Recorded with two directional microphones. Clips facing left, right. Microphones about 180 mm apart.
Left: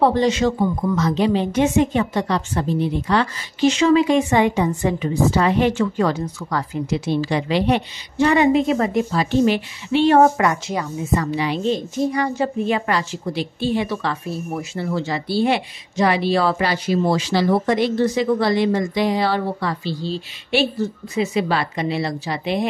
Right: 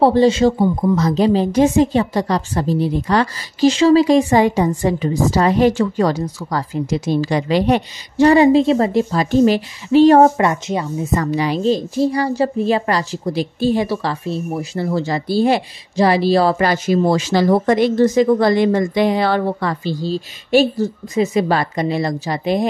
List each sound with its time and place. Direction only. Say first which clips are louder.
0.0 s a woman's voice: right 5 dB; 30° right (ahead or behind)
11.0 s a woman's voice: right 2 dB; 40° right (ahead or behind); by 14.7 s 25° right (ahead or behind)
14.7 s speech: right 4 dB; 40° right (ahead or behind)